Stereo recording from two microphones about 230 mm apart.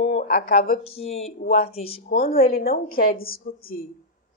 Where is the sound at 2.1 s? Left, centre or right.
Left.